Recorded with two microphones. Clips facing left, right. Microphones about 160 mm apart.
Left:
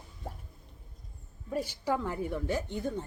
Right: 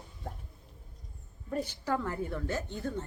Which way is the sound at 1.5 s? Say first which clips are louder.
Left 1 dB; 10° left (ahead or behind).